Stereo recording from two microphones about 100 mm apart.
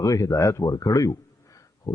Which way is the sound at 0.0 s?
35° left (ahead or behind).